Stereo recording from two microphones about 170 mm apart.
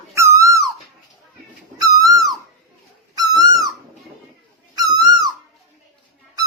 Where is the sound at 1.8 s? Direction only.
20° right (ahead or behind).